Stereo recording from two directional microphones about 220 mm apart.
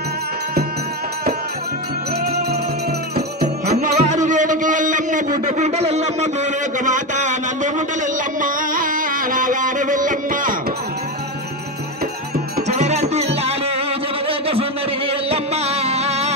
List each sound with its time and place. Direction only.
3.6 s music: 35° right (ahead or behind)
12.5 s music: 30° right (ahead or behind)
14.2 s a sound: 25° right (ahead or behind)
15.2 s music: 25° right (ahead or behind)